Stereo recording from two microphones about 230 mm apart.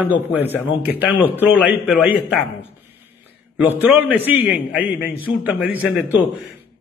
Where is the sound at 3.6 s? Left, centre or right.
Centre.